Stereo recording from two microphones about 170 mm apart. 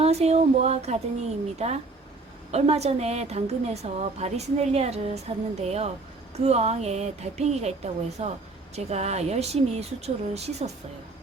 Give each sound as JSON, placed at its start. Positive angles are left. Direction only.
{"t": 0.0, "sound": "a woman's voice", "side_deg": -40}